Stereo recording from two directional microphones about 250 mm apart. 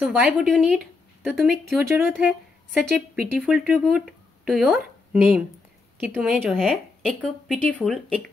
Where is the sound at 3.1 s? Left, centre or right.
Centre.